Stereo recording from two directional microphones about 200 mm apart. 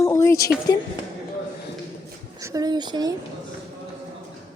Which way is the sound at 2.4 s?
15° right (ahead or behind).